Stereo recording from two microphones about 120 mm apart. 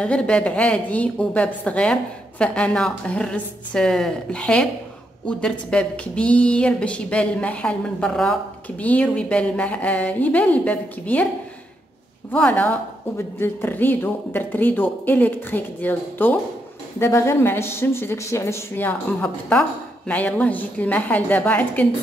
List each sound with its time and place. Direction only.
0.0 s a woman's voice: 10° left (ahead or behind)
12.3 s a woman's voice: 15° left (ahead or behind)